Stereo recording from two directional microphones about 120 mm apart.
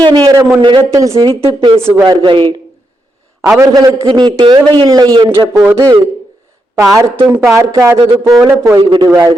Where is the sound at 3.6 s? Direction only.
30° right (ahead or behind).